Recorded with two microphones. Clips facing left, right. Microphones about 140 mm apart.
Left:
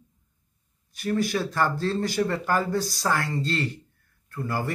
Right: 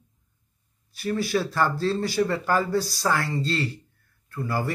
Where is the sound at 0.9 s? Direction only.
50° left (ahead or behind).